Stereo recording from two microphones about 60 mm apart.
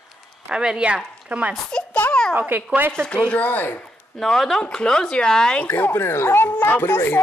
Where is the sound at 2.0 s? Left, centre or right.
Left.